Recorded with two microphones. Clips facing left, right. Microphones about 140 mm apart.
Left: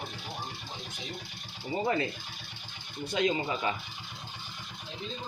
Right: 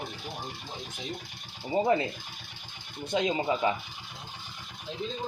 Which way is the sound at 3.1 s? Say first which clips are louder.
Right 2 dB; 25° right (ahead or behind).